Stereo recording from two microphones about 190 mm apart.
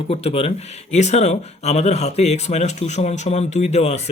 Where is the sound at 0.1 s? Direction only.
30° left (ahead or behind).